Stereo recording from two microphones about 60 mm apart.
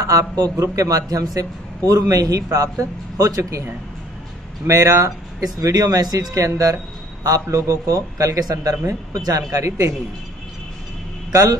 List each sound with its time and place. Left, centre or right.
0.0 s speech: right
4.6 s speech: right
7.4 s speech: right